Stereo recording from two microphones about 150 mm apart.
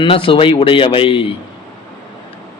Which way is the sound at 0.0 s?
35° left (ahead or behind).